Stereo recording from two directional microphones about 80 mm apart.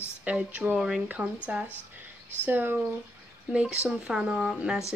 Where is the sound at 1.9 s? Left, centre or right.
Right.